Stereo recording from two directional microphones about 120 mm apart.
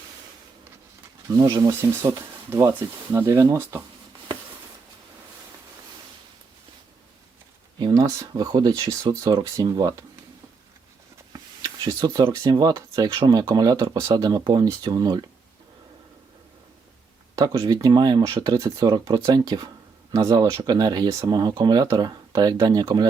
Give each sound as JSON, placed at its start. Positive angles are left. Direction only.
{"t": 1.8, "sound": "speech", "side_deg": -20}
{"t": 7.8, "sound": "speech", "side_deg": -35}
{"t": 11.3, "sound": "speech", "side_deg": -30}
{"t": 17.3, "sound": "speech", "side_deg": -30}